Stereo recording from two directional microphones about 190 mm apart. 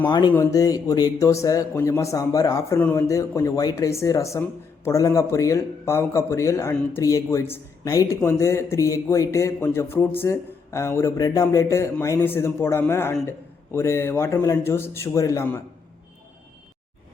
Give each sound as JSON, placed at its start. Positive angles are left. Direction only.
{"t": 0.0, "sound": "speech", "side_deg": 25}